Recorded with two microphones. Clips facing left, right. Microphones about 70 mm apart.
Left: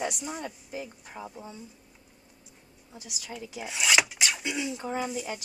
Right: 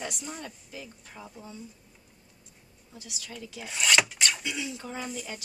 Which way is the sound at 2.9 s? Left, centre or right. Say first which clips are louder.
Left 2 dB; centre.